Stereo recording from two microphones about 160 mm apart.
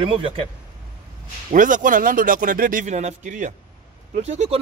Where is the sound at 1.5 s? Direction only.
55° right (ahead or behind).